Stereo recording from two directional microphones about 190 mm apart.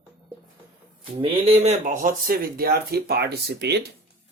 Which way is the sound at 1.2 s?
30° right (ahead or behind).